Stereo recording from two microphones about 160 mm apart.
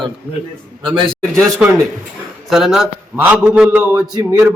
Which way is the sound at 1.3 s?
15° right (ahead or behind).